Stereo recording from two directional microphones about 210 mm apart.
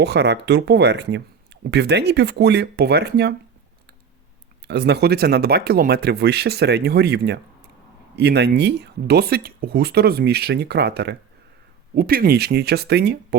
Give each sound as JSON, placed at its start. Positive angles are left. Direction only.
{"t": 0.0, "sound": "speech", "side_deg": -55}
{"t": 4.7, "sound": "speech", "side_deg": -55}